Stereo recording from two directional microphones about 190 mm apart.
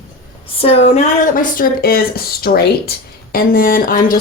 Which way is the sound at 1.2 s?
45° left (ahead or behind).